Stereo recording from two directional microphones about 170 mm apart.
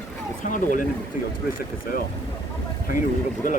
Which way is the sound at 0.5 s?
50° left (ahead or behind).